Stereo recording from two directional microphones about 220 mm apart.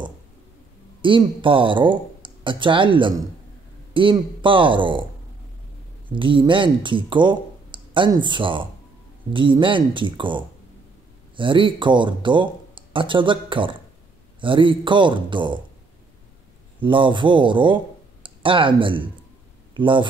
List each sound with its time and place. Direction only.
1.0 s speech: 20° right (ahead or behind)
6.0 s speech: 20° right (ahead or behind)
16.8 s speech: 20° right (ahead or behind)